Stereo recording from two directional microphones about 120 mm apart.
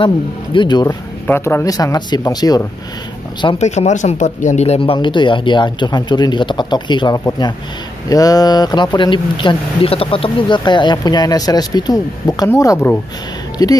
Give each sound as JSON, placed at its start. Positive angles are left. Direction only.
{"t": 0.0, "sound": "speech", "side_deg": 45}
{"t": 1.2, "sound": "speech", "side_deg": 20}
{"t": 3.5, "sound": "speech", "side_deg": 70}
{"t": 4.7, "sound": "speech", "side_deg": 45}